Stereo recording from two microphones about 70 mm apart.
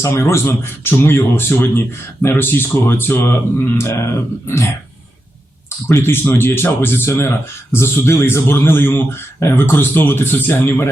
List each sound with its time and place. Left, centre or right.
0.0 s speech: left
5.9 s speech: left